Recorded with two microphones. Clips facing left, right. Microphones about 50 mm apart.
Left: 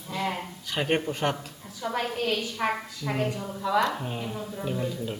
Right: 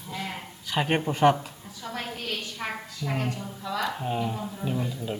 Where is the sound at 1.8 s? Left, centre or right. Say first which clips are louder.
Left 6 dB; centre.